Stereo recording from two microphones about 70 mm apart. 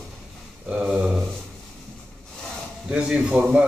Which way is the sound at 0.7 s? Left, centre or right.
Centre.